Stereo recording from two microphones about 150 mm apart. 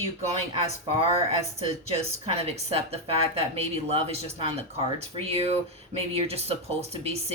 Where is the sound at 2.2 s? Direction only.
45° right (ahead or behind).